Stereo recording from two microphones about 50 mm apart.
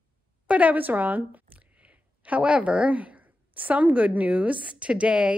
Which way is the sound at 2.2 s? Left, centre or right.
Right.